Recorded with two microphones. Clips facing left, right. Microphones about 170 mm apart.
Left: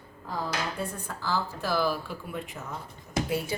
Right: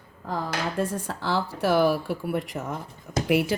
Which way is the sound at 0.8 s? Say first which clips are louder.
Right 7 dB; 90° right.